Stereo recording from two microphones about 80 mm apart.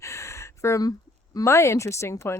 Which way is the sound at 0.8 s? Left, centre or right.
Left.